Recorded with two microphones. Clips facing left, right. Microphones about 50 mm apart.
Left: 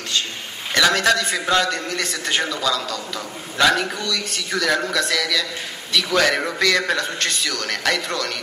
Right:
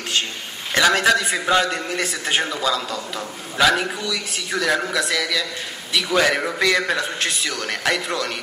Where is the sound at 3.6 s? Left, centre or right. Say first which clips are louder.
Even; centre.